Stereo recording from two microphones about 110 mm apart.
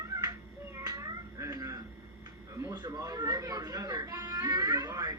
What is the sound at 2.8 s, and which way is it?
Speech, 35° right (ahead or behind).